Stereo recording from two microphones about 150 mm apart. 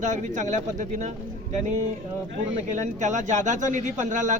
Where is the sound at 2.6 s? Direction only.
55° right (ahead or behind).